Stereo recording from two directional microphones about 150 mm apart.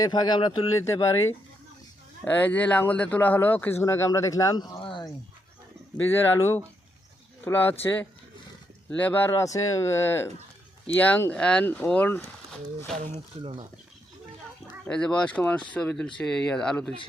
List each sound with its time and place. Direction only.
0.0 s speech: 25° left (ahead or behind)
4.8 s a sound: 30° left (ahead or behind)
6.1 s speech: 15° left (ahead or behind)
13.4 s speech: 35° right (ahead or behind)
14.8 s speech: 5° left (ahead or behind)